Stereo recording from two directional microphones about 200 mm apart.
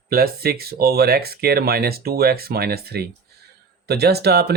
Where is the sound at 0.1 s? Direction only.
50° right (ahead or behind).